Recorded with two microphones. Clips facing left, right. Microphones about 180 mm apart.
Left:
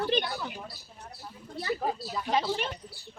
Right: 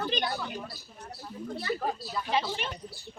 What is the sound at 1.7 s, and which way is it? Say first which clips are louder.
Speech: left 1 dB; 15° left (ahead or behind).